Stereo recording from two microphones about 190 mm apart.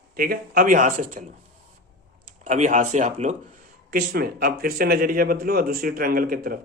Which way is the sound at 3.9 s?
55° right (ahead or behind).